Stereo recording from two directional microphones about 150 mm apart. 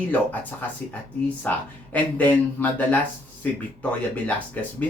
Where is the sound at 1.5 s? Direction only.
10° left (ahead or behind).